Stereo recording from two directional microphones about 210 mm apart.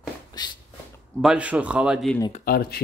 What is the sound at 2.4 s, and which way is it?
Speech, 45° left (ahead or behind).